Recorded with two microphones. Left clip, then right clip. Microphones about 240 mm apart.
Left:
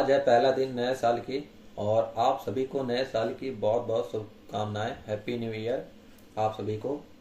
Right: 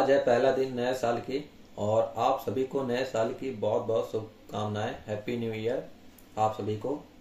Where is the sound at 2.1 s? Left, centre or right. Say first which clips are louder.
Left 1 dB; centre.